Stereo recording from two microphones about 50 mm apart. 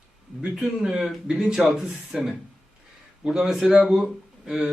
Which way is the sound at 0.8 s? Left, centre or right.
Centre.